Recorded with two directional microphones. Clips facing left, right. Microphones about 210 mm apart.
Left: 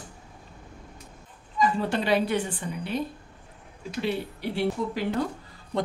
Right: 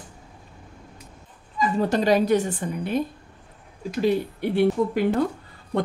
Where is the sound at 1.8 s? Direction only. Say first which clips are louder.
Right 9 dB; 40° right (ahead or behind).